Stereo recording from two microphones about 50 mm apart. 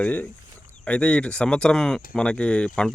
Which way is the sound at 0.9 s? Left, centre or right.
Left.